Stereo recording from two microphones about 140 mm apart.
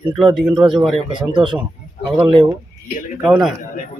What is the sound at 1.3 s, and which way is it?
Speech, 35° right (ahead or behind).